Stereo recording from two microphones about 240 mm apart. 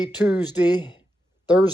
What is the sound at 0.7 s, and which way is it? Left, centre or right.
Speech, centre.